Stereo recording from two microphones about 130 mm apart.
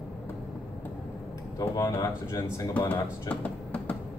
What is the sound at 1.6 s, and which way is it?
Speech, 25° left (ahead or behind).